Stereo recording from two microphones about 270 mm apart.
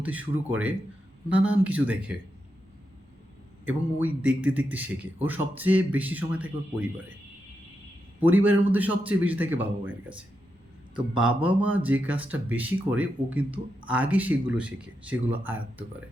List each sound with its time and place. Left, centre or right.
0.0 s speech: centre
3.9 s speech: centre
8.2 s a man's voice: centre
10.9 s speech: centre